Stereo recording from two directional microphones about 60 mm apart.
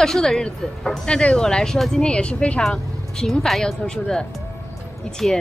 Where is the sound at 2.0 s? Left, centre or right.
Centre.